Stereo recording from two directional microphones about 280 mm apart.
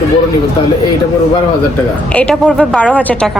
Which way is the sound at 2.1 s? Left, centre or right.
Centre.